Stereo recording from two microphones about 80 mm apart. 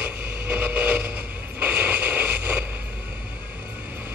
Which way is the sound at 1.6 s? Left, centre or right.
Centre.